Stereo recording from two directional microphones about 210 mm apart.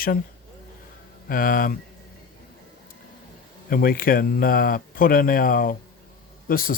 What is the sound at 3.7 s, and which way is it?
Speech, 45° left (ahead or behind).